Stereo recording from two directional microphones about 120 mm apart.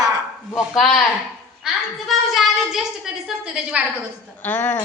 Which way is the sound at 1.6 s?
Centre (ahead or behind).